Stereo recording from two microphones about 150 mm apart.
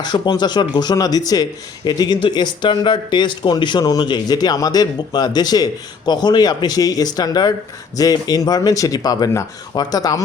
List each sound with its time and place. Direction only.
0.0 s speech: 30° left (ahead or behind)